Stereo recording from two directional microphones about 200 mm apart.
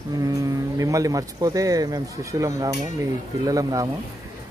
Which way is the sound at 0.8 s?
15° right (ahead or behind).